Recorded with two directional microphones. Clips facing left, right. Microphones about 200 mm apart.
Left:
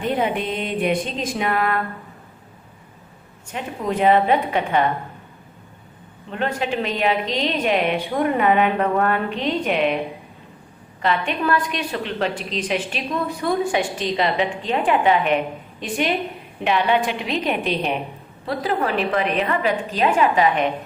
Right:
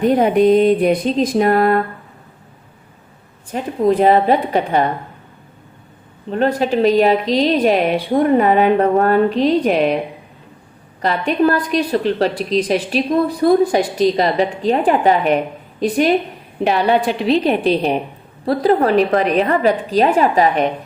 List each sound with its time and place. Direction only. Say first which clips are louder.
0.0 s a woman's voice: right 10 dB; 45° right (ahead or behind)
3.5 s a woman's voice: right 9 dB; 35° right (ahead or behind)
6.3 s a woman's voice: right 7 dB; 35° right (ahead or behind)
11.0 s a woman's voice: right 6 dB; 40° right (ahead or behind)